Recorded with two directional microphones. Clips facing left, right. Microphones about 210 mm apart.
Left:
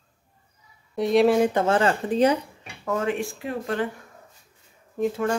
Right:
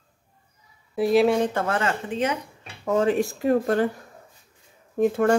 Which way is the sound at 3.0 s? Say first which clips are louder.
Right 8 dB; 35° right (ahead or behind).